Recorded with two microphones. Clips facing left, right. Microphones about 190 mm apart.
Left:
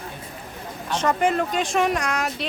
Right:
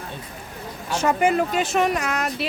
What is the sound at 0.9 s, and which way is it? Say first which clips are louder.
Speech: right 1 dB; 10° right (ahead or behind).